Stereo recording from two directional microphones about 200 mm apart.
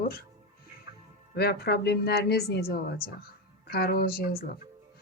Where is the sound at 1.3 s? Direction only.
55° left (ahead or behind).